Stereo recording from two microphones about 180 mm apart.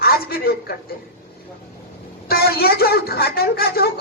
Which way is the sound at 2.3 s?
55° left (ahead or behind).